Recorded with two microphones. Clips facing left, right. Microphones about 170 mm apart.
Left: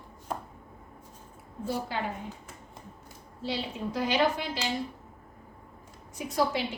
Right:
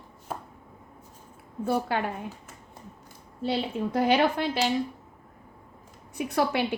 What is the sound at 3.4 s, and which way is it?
A woman's voice, 55° right (ahead or behind).